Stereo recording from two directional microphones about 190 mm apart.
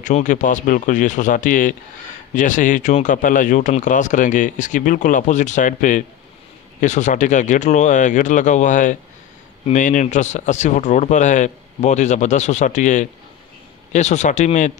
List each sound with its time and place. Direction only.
0.0 s speech: 40° left (ahead or behind)